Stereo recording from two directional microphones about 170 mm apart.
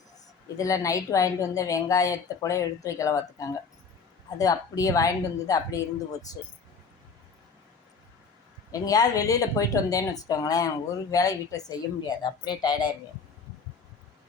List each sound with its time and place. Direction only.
0.5 s speech: 20° left (ahead or behind)
8.7 s speech: 20° left (ahead or behind)